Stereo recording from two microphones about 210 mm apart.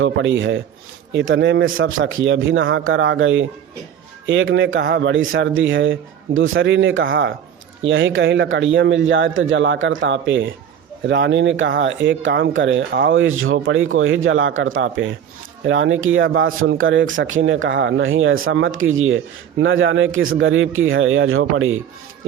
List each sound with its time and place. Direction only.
0.0 s speech: 65° right (ahead or behind)